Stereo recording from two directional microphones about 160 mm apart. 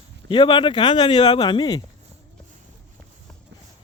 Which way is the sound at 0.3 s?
30° left (ahead or behind).